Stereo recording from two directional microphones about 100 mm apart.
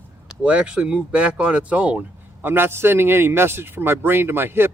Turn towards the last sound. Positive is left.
turn(degrees=-25)  # may be behind; listen again after turning